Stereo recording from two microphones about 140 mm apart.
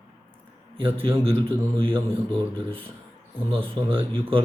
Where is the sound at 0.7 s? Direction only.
40° right (ahead or behind).